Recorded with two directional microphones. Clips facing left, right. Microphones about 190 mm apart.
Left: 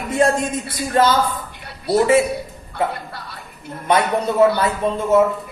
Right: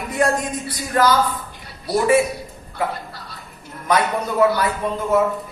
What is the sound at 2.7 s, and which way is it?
Speech, 65° left (ahead or behind).